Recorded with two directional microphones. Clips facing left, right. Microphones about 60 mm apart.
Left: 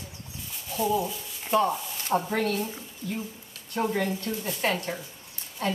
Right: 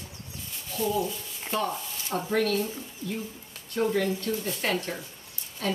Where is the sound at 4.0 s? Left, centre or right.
Left.